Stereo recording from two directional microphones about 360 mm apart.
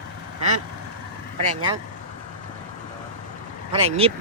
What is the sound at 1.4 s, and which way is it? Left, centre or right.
Speech, centre.